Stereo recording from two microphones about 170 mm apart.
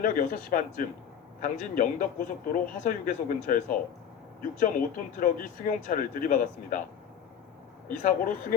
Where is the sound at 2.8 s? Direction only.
50° left (ahead or behind).